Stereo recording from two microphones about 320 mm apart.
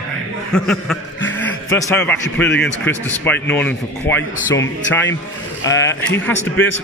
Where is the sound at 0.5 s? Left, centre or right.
Centre.